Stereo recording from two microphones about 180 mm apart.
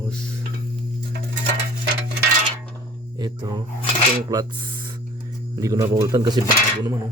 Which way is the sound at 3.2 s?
25° right (ahead or behind).